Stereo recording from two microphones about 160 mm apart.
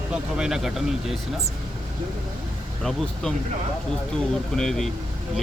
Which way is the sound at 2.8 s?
Centre (ahead or behind).